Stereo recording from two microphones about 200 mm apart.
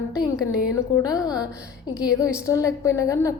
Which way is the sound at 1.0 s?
20° left (ahead or behind).